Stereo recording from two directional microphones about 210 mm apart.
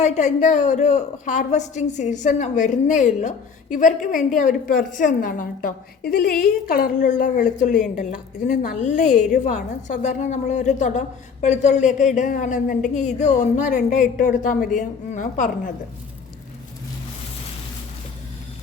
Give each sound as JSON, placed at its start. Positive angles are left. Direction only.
{"t": 0.0, "sound": "a woman's voice", "side_deg": 35}
{"t": 7.0, "sound": "a woman's voice", "side_deg": 35}